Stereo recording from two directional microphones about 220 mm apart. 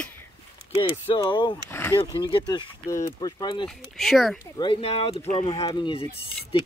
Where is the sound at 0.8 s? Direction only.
25° left (ahead or behind).